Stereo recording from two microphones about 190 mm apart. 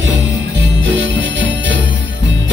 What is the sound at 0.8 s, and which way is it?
Music, 90° right.